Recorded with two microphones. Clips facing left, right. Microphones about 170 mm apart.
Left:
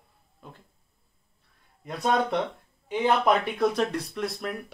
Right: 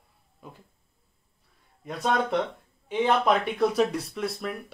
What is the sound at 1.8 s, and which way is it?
Speech, centre (ahead or behind).